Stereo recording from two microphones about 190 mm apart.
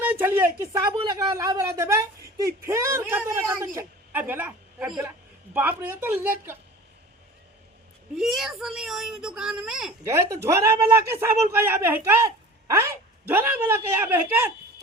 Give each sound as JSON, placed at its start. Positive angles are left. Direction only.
{"t": 0.0, "sound": "a man's voice", "side_deg": -10}
{"t": 8.1, "sound": "a woman's voice", "side_deg": 0}
{"t": 10.1, "sound": "a man's voice", "side_deg": -15}
{"t": 13.2, "sound": "a man's voice", "side_deg": -10}